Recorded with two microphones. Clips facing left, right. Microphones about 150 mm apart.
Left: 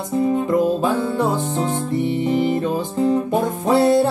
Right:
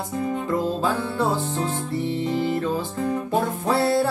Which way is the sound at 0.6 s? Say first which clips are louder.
Left 6 dB; 20° left (ahead or behind).